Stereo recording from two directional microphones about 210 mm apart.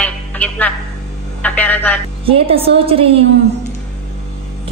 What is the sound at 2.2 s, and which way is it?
Speech, 25° right (ahead or behind).